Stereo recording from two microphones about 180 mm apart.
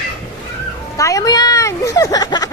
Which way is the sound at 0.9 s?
20° left (ahead or behind).